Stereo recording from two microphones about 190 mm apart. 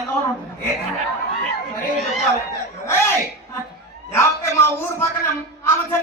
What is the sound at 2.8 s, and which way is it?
Speech, 15° left (ahead or behind).